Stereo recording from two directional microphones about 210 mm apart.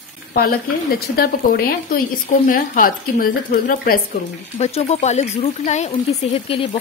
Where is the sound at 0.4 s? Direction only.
45° left (ahead or behind).